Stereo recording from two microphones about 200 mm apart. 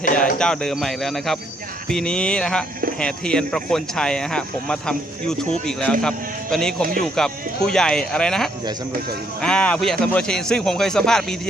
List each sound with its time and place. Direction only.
0.0 s speech: 40° left (ahead or behind)
0.3 s speech: 5° left (ahead or behind)